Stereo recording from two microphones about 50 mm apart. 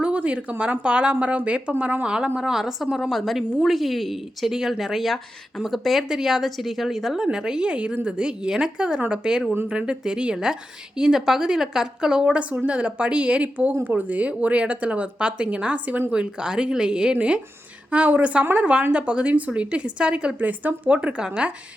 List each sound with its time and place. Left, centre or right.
0.0 s a woman's voice: right
2.0 s a woman's voice: centre
20.4 s a woman's voice: right; by 21.5 s centre